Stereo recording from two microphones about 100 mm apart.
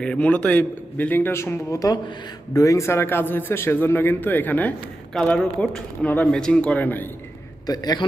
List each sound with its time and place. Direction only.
0.0 s a man's voice: 10° left (ahead or behind)
5.1 s a man's voice: 5° left (ahead or behind)
7.7 s a man's voice: 40° left (ahead or behind)